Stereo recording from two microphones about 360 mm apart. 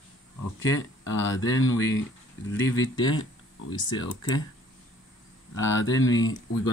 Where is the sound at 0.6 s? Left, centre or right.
Left.